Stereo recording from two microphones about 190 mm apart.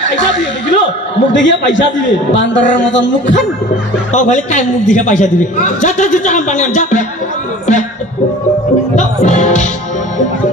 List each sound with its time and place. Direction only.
0.1 s a man's voice: 70° left (ahead or behind)
4.1 s a man's voice: 40° left (ahead or behind)
8.9 s music: 40° left (ahead or behind)